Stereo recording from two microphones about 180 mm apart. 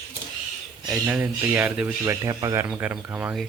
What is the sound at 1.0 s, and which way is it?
Speech, 5° right (ahead or behind).